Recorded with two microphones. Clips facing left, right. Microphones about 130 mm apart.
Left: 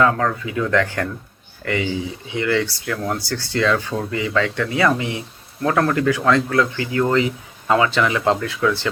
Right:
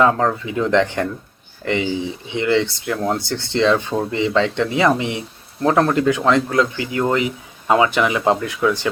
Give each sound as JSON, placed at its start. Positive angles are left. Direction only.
{"t": 0.0, "sound": "speech", "side_deg": -25}